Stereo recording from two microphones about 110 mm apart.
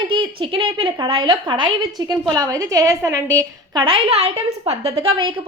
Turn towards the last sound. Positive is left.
turn(degrees=-55)  # may be behind; listen again after turning